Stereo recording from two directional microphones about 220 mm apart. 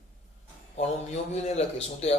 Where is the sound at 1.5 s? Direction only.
30° left (ahead or behind).